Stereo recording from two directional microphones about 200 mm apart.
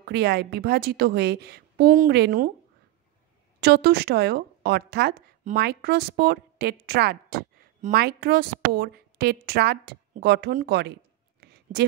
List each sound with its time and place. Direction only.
0.0 s a woman's voice: 55° right (ahead or behind)
3.6 s a woman's voice: 55° right (ahead or behind)